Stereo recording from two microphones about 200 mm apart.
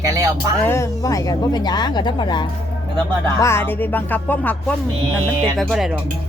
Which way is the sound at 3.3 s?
15° left (ahead or behind).